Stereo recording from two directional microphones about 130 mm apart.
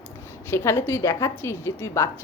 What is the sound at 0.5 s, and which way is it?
A woman's voice, 20° left (ahead or behind).